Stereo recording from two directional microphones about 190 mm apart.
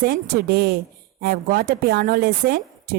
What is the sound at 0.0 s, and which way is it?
Speech, 55° right (ahead or behind).